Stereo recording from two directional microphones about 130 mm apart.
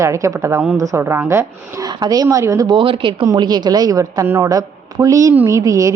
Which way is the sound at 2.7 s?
40° right (ahead or behind).